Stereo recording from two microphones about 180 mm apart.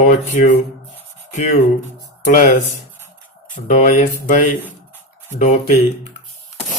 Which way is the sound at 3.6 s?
45° left (ahead or behind).